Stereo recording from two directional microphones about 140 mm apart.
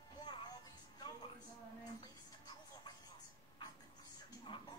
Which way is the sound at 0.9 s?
30° left (ahead or behind).